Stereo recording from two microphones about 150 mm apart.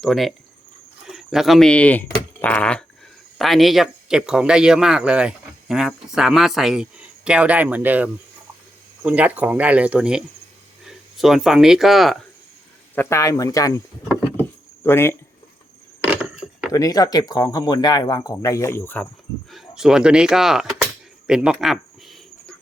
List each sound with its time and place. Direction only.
0.0 s speech: centre (ahead or behind)
13.0 s speech: 20° left (ahead or behind)
14.8 s speech: 15° left (ahead or behind)
16.0 s wood: 5° right (ahead or behind)
16.7 s speech: 25° left (ahead or behind)
19.5 s speech: centre (ahead or behind)
21.2 s cricket: 5° right (ahead or behind)